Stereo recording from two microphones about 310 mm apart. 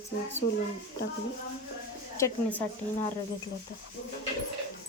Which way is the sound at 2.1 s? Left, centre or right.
Centre.